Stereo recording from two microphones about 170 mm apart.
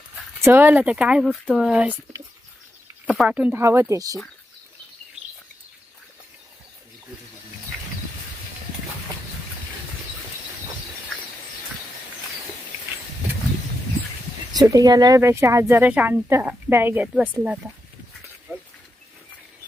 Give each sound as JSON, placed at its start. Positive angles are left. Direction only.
{"t": 0.4, "sound": "speech", "side_deg": -15}
{"t": 3.1, "sound": "speech", "side_deg": -5}
{"t": 14.5, "sound": "speech", "side_deg": -20}